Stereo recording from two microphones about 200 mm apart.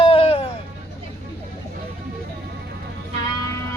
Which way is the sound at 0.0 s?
30° left (ahead or behind).